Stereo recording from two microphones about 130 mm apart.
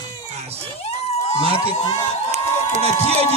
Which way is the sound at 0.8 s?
55° left (ahead or behind).